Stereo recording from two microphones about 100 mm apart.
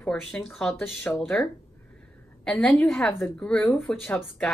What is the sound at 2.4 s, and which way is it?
Speech, 10° left (ahead or behind).